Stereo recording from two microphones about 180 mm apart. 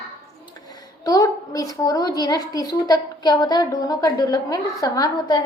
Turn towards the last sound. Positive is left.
turn(degrees=20)  # may be behind; listen again after turning